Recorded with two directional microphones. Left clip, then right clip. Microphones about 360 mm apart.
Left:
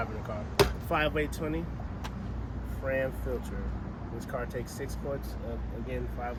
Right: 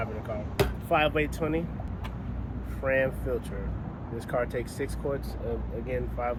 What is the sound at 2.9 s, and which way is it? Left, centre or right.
Speech, centre.